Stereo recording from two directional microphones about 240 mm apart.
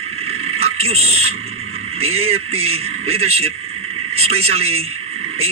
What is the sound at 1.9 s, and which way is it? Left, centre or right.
A man's voice, right.